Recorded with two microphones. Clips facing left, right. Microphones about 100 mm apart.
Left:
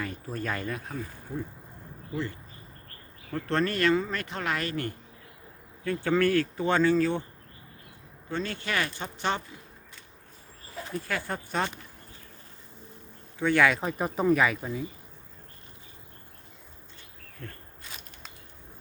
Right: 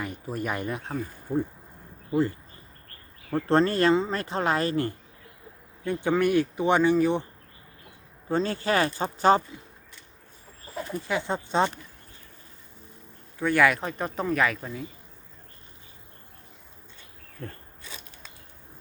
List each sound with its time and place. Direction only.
0.0 s speech: 15° right (ahead or behind)
3.3 s speech: 30° right (ahead or behind)
5.8 s speech: 20° right (ahead or behind)
8.3 s speech: 35° right (ahead or behind)
10.9 s speech: 20° right (ahead or behind)
13.4 s speech: 5° right (ahead or behind)
17.4 s speech: 35° right (ahead or behind)